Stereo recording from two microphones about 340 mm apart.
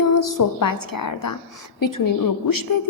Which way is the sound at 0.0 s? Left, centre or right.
Left.